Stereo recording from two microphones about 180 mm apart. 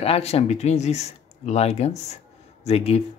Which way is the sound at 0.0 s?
35° left (ahead or behind).